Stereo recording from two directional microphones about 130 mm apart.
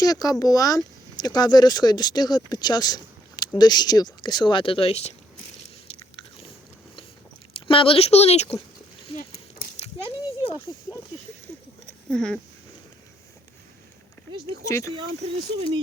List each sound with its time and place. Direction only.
0.0 s speech: 30° left (ahead or behind); by 5.1 s 50° left (ahead or behind)
7.5 s speech: 45° left (ahead or behind)
9.8 s a sound: 45° left (ahead or behind)
12.1 s speech: 5° left (ahead or behind)
14.6 s speech: 25° left (ahead or behind)